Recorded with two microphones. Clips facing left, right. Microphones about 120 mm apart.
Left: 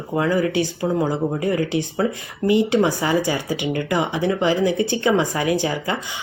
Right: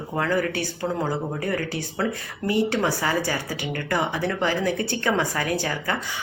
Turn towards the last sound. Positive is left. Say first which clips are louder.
# left 5 dB
turn(degrees=15)  # may be behind; listen again after turning